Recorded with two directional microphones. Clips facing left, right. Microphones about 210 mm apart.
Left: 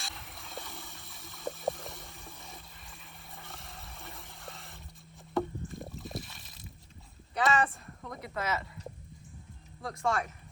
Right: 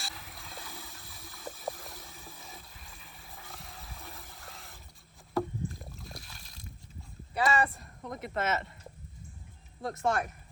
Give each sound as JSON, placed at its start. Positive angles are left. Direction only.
{"t": 0.0, "sound": "water", "side_deg": 0}
{"t": 5.3, "sound": "rowboat", "side_deg": 0}
{"t": 7.3, "sound": "speech", "side_deg": 0}
{"t": 8.3, "sound": "speech", "side_deg": -25}
{"t": 9.9, "sound": "speech", "side_deg": 0}